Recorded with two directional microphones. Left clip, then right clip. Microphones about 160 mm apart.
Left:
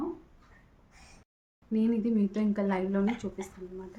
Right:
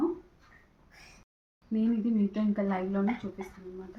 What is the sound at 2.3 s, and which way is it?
Speech, 45° left (ahead or behind).